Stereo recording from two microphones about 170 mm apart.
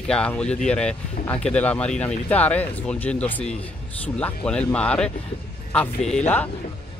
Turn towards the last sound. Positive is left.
turn(degrees=10)  # may be behind; listen again after turning